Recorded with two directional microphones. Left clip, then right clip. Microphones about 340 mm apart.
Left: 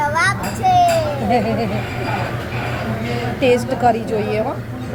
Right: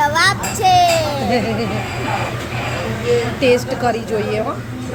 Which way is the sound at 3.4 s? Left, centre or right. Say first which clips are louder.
Left 3 dB; centre.